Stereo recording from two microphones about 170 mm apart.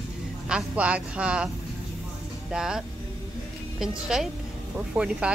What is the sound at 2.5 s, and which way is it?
Speech, 5° right (ahead or behind).